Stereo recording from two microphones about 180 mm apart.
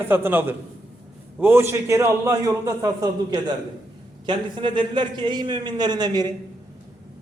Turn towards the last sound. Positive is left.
turn(degrees=-20)  # may be behind; listen again after turning